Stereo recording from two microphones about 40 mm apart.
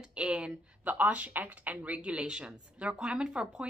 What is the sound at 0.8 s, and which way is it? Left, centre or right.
A woman's voice, right.